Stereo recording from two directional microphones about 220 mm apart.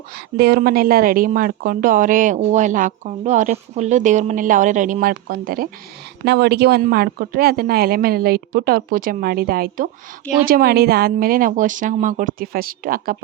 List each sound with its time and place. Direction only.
0.1 s a woman's voice: 45° right (ahead or behind)